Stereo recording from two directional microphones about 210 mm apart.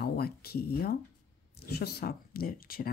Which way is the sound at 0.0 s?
50° left (ahead or behind).